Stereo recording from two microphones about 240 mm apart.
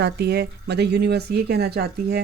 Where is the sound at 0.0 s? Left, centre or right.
Right.